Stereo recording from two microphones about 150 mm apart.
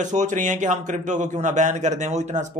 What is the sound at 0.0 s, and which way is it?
A man's voice, 55° right (ahead or behind).